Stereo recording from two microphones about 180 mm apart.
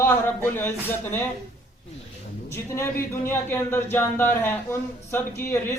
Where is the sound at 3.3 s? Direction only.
10° left (ahead or behind).